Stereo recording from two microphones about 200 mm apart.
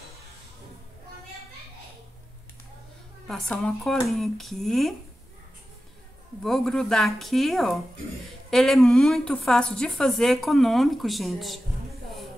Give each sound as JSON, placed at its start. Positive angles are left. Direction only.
{"t": 3.3, "sound": "speech", "side_deg": 0}
{"t": 6.4, "sound": "speech", "side_deg": 0}